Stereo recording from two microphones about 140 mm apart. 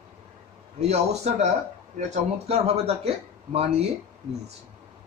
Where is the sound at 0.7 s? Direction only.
50° right (ahead or behind).